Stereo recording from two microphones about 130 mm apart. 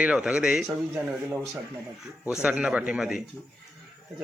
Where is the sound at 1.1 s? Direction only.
15° right (ahead or behind).